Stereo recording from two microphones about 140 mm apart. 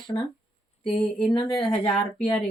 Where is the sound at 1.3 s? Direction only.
40° left (ahead or behind).